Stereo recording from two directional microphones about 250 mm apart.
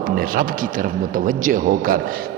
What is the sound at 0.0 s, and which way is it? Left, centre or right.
A man's voice, right.